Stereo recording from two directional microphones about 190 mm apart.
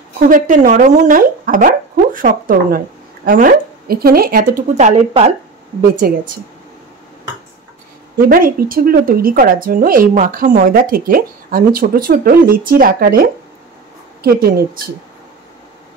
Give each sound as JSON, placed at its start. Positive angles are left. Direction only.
{"t": 0.3, "sound": "a woman's voice", "side_deg": -45}
{"t": 5.8, "sound": "a woman's voice", "side_deg": -50}
{"t": 8.3, "sound": "a woman's voice", "side_deg": -50}